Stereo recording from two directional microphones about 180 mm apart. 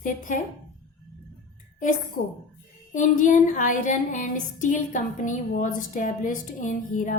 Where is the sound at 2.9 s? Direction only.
45° left (ahead or behind).